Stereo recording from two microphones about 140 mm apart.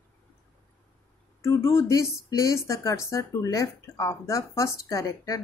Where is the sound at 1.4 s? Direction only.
20° left (ahead or behind).